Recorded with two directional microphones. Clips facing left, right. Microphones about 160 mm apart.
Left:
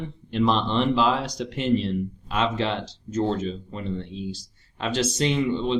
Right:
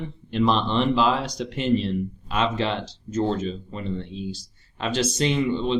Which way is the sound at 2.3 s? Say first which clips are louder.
Right 1 dB; 15° right (ahead or behind).